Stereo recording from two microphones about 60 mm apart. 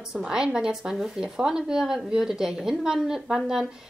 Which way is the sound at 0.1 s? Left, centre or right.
Centre.